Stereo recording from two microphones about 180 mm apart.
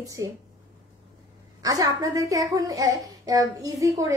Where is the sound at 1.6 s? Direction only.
20° right (ahead or behind).